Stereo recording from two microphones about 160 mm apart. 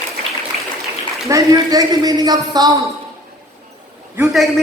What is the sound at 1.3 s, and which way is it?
Speech, 25° right (ahead or behind).